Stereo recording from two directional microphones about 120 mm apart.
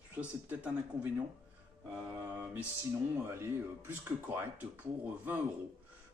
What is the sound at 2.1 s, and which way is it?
Speech, 15° right (ahead or behind).